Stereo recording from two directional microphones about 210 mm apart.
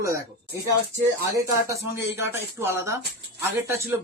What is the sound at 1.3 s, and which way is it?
Speech, 15° right (ahead or behind).